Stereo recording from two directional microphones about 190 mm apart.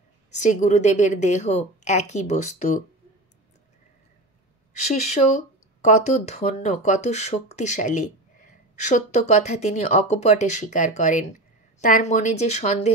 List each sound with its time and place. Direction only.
0.3 s speech: 40° left (ahead or behind)
5.0 s speech: 40° left (ahead or behind)